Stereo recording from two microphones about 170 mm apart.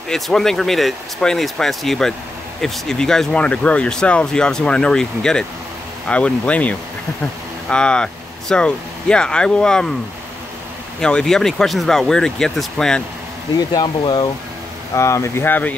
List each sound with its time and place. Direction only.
0.1 s speech: 5° left (ahead or behind)
11.0 s speech: 5° left (ahead or behind)
13.7 s speech: 25° left (ahead or behind)